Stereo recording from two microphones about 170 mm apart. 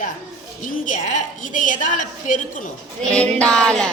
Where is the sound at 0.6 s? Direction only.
50° left (ahead or behind).